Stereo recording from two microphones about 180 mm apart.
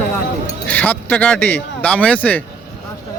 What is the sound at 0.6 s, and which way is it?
A man's voice, 10° left (ahead or behind).